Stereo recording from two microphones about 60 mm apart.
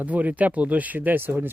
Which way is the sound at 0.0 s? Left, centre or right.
Right.